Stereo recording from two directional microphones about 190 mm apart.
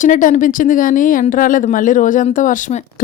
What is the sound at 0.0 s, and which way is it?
A woman's voice, 40° left (ahead or behind).